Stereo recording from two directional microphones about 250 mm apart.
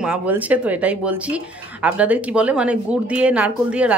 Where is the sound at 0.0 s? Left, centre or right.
Centre.